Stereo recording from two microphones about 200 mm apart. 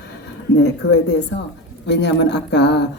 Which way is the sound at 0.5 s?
60° left (ahead or behind).